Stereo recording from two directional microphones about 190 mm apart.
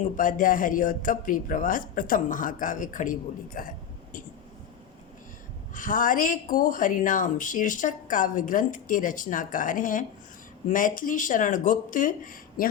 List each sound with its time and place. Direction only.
0.0 s a woman's voice: 45° left (ahead or behind)
5.7 s a woman's voice: 45° left (ahead or behind)